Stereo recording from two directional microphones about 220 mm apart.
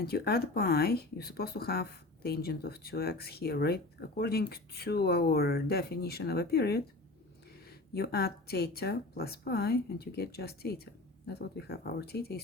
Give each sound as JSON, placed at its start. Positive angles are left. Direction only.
{"t": 0.0, "sound": "speech", "side_deg": 45}
{"t": 7.9, "sound": "speech", "side_deg": 45}